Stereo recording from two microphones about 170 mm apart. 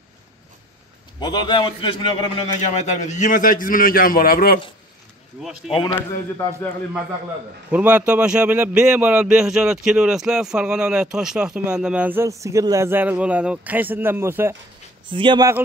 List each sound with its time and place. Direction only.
1.2 s a man's voice: 25° left (ahead or behind)
2.7 s a man's voice: 45° left (ahead or behind); by 4.6 s 60° left (ahead or behind)
5.9 s speech: 15° left (ahead or behind)
7.7 s a man's voice: 5° right (ahead or behind)
15.0 s speech: 30° right (ahead or behind)